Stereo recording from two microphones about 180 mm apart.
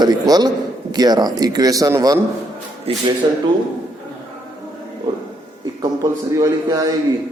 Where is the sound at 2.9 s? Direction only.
35° right (ahead or behind).